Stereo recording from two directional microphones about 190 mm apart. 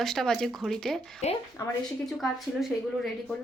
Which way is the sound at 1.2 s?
35° left (ahead or behind).